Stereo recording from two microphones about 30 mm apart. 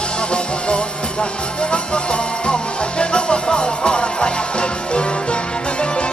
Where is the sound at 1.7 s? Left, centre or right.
Left.